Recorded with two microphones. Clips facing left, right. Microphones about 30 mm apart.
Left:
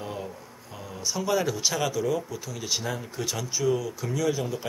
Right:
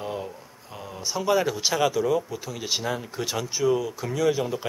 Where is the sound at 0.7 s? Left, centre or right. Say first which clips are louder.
Right 1 dB; centre.